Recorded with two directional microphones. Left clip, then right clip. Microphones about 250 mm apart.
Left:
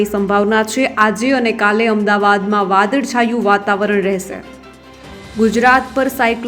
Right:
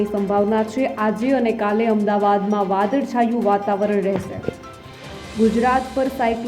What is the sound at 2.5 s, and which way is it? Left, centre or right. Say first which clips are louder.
Speech: left 5 dB; left.